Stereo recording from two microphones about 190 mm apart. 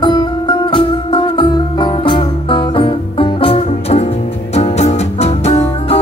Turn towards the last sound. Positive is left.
turn(degrees=35)  # may be behind; listen again after turning